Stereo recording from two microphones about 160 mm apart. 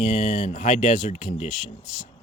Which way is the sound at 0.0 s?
45° left (ahead or behind).